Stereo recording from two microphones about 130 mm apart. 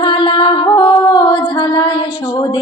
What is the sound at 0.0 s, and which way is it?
Music, 40° left (ahead or behind).